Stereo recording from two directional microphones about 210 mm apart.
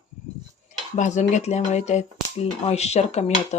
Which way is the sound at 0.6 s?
35° left (ahead or behind).